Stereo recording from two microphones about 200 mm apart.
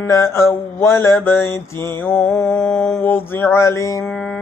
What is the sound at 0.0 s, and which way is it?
Mantra, 15° left (ahead or behind).